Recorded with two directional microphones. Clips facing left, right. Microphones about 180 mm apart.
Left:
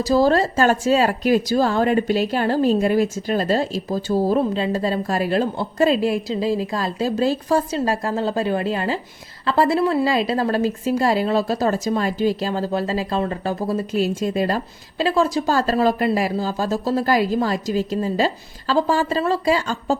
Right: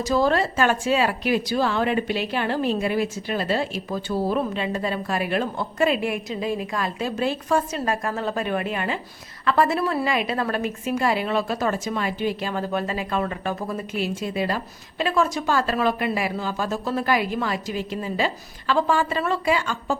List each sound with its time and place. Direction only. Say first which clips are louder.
0.0 s a woman's voice: left 4 dB; 35° left (ahead or behind)